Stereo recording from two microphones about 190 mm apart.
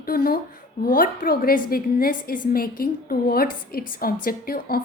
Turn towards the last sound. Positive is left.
turn(degrees=50)  # may be behind; listen again after turning